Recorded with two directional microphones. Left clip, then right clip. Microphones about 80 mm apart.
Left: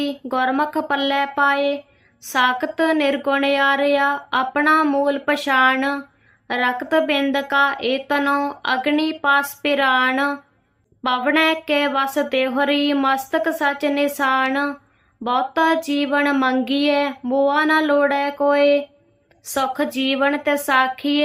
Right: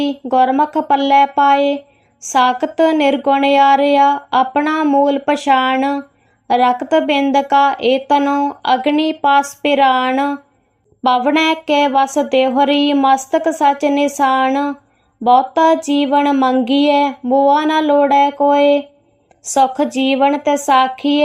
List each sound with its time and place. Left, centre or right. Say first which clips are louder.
0.0 s speech: right 7 dB; right
11.0 s a sound: right 7 dB; right
11.3 s speech: right 4 dB; right